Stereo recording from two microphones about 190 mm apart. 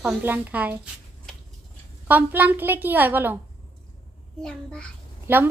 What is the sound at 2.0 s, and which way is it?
A woman's voice, 10° right (ahead or behind).